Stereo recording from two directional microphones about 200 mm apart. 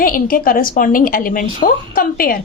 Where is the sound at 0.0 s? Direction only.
45° left (ahead or behind).